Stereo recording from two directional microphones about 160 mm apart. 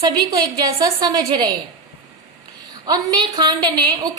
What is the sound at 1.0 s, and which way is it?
Speech, 25° right (ahead or behind).